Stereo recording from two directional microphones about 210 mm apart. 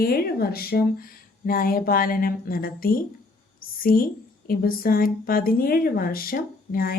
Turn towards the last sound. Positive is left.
turn(degrees=45)  # may be behind; listen again after turning